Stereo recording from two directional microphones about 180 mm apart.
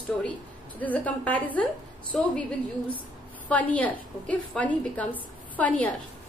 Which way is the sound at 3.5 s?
10° left (ahead or behind).